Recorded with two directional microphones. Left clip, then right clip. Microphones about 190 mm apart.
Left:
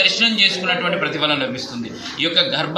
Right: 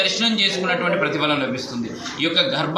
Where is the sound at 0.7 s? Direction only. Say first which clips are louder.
Left 1 dB; 10° left (ahead or behind).